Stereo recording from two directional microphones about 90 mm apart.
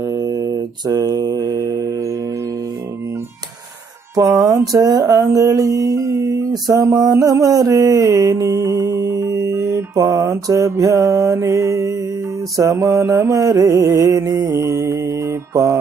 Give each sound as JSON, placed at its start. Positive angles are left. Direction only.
{"t": 0.1, "sound": "mantra", "side_deg": -45}
{"t": 4.1, "sound": "speech", "side_deg": -45}
{"t": 4.4, "sound": "music", "side_deg": -35}